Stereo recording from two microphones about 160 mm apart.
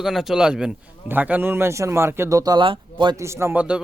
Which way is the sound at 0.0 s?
Centre (ahead or behind).